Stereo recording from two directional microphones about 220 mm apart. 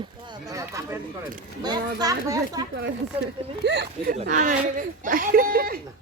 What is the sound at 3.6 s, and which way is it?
Speech, 50° right (ahead or behind).